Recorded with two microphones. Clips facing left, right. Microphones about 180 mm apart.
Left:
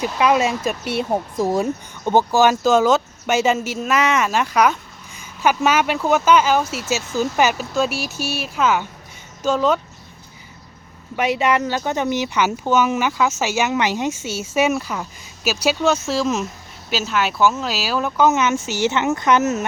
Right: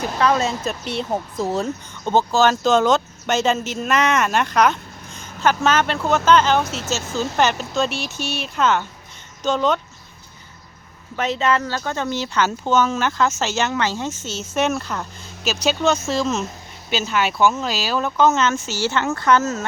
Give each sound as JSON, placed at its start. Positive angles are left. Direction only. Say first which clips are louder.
{"t": 0.2, "sound": "speech", "louder": "left 2 dB", "side_deg": 10}
{"t": 11.2, "sound": "speech", "louder": "left 2 dB", "side_deg": 15}